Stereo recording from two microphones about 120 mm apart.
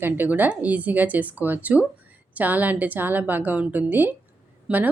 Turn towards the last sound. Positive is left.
turn(degrees=-5)  # may be behind; listen again after turning